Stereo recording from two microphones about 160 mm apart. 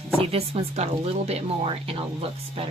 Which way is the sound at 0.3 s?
40° right (ahead or behind).